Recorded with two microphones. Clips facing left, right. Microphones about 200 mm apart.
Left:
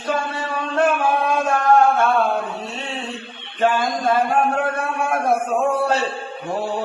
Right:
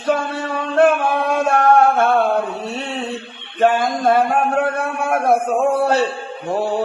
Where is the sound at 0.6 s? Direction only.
65° right (ahead or behind).